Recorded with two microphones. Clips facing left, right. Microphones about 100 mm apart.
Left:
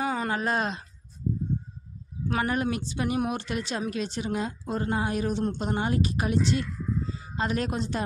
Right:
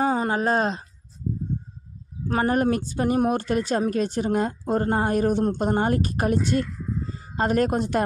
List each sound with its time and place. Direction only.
0.0 s speech: 30° right (ahead or behind)
2.2 s a woman's voice: 35° right (ahead or behind)